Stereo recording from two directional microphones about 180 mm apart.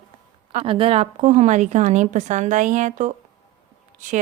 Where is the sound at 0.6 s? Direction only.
30° right (ahead or behind).